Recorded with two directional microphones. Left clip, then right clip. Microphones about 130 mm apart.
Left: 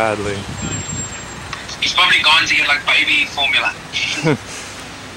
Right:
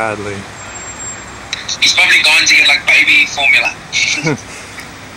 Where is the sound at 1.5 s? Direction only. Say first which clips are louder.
Right 8 dB; 70° right (ahead or behind).